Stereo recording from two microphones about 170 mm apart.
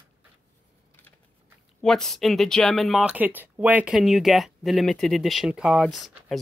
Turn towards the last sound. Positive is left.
turn(degrees=0)  # may be behind; listen again after turning